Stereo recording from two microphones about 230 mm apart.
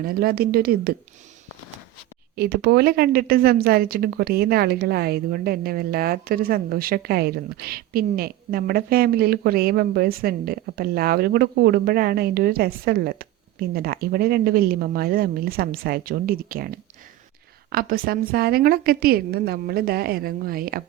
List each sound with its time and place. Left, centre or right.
0.0 s a woman's voice: right
2.3 s a woman's voice: right